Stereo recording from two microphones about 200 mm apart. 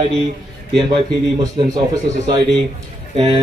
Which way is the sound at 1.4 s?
20° right (ahead or behind).